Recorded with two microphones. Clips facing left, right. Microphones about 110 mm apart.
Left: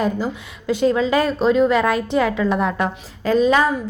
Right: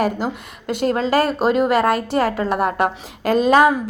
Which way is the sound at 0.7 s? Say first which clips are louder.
Left 2 dB; 60° right (ahead or behind).